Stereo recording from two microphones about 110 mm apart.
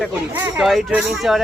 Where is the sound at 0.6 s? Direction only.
5° right (ahead or behind).